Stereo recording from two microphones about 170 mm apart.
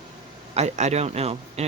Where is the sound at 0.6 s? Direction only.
40° right (ahead or behind).